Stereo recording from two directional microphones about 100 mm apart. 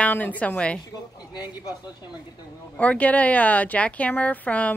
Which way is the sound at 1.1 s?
45° left (ahead or behind).